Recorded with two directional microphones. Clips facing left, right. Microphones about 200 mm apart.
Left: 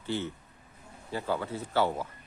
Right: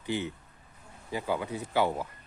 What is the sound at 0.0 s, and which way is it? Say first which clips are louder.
Speech: right 1 dB; 15° right (ahead or behind).